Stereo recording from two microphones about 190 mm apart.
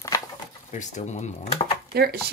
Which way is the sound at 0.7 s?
40° left (ahead or behind).